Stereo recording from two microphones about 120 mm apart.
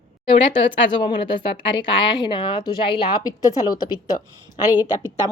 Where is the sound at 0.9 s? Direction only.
40° left (ahead or behind).